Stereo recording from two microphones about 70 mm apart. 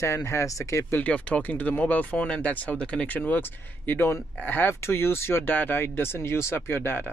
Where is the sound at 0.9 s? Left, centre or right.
Left.